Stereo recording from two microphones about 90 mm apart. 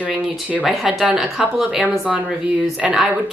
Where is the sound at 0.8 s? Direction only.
5° right (ahead or behind).